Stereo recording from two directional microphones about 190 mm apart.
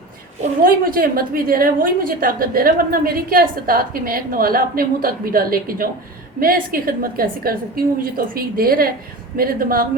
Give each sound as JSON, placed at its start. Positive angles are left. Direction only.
{"t": 0.6, "sound": "a woman's voice", "side_deg": -50}